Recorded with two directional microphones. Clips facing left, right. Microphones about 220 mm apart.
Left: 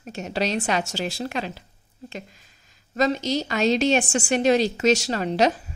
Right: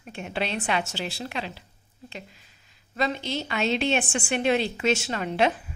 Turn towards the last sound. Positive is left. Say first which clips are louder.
# left 3 dB
turn(degrees=40)  # may be behind; listen again after turning